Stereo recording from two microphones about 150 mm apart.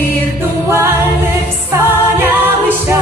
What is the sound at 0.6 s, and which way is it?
Singing, 15° right (ahead or behind).